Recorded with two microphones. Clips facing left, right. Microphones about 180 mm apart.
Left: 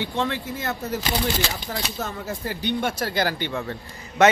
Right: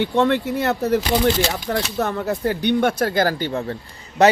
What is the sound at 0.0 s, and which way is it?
A man's voice, 65° right (ahead or behind).